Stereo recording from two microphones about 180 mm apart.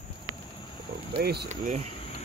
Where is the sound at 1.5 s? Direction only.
45° right (ahead or behind).